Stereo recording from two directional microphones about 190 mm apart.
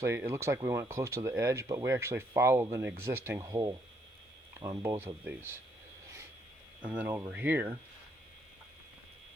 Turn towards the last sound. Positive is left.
turn(degrees=-10)  # may be behind; listen again after turning